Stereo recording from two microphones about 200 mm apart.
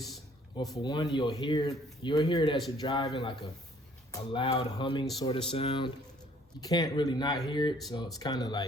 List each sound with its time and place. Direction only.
0.5 s speech: 20° left (ahead or behind)